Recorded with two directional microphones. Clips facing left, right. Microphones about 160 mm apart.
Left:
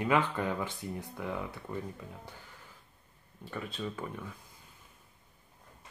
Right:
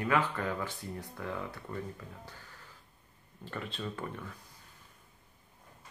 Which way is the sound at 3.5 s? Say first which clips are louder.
Left 1 dB; 5° left (ahead or behind).